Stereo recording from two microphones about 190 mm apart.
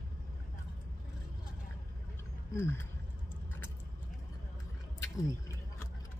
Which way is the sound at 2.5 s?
15° left (ahead or behind).